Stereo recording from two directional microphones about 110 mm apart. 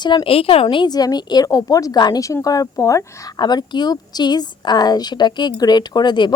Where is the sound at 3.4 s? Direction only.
40° left (ahead or behind).